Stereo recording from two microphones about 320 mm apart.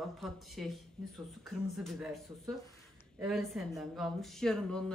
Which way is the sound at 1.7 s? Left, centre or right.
Centre.